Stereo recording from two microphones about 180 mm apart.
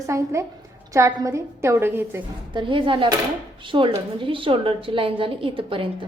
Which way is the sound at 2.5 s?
25° right (ahead or behind).